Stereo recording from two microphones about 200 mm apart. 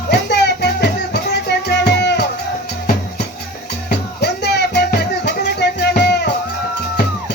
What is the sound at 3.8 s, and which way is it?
Music, 55° left (ahead or behind).